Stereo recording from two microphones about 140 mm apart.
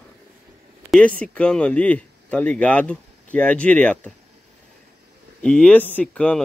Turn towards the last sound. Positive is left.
turn(degrees=10)  # may be behind; listen again after turning